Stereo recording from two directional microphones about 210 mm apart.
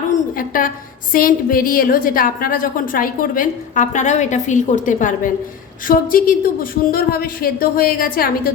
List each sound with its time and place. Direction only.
0.3 s a woman's voice: 40° left (ahead or behind)